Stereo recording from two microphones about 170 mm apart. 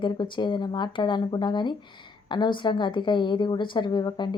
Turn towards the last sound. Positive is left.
turn(degrees=25)  # may be behind; listen again after turning